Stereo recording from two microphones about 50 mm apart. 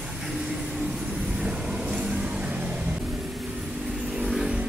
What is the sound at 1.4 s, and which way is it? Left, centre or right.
Vehicle, centre.